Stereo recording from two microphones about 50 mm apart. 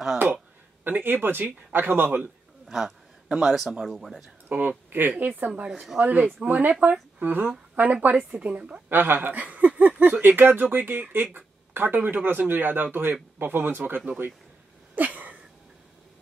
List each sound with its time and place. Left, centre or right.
0.8 s a man's voice: right
3.3 s a man's voice: centre
4.5 s speech: right
5.7 s speech: centre
5.9 s a woman's voice: right
8.9 s a man's voice: right
9.4 s speech: right
15.0 s a sound: right